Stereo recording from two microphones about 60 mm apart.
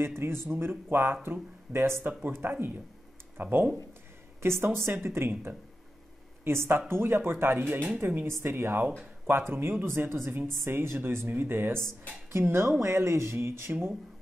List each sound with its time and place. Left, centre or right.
0.0 s speech: right
8.3 s speech: right
9.5 s speech: right